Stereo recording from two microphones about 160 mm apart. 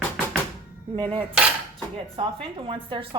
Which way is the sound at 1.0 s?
35° right (ahead or behind).